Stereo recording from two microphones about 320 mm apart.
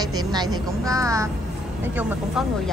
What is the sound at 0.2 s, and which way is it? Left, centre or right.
A woman's voice, centre.